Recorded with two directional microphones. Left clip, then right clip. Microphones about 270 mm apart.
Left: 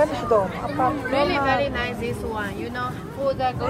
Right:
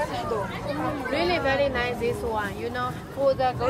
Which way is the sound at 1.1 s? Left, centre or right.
Right.